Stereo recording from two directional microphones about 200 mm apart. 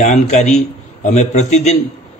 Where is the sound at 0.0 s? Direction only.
35° left (ahead or behind).